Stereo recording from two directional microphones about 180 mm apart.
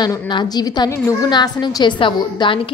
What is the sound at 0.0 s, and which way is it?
A woman's voice, 25° left (ahead or behind).